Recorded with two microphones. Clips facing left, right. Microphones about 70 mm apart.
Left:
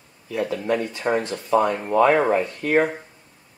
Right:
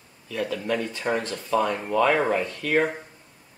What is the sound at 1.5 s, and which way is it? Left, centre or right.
Speech, left.